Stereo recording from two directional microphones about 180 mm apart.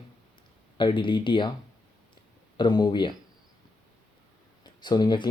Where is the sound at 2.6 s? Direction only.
25° left (ahead or behind).